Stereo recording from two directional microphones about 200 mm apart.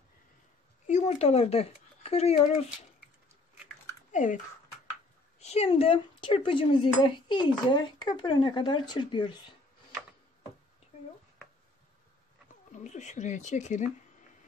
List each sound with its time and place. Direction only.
0.8 s speech: 35° left (ahead or behind)
4.1 s speech: 40° left (ahead or behind)
5.4 s speech: 30° left (ahead or behind)
12.7 s speech: 35° left (ahead or behind)